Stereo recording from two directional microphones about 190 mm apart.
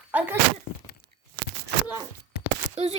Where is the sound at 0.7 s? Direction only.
65° left (ahead or behind).